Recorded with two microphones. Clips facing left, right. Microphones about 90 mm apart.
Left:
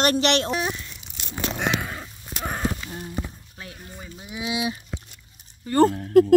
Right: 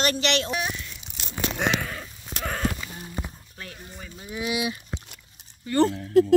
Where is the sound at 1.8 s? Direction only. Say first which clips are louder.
Left 1 dB; 25° left (ahead or behind).